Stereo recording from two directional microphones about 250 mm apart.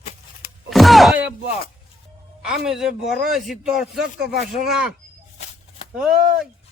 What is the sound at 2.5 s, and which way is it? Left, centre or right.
A man's voice, centre.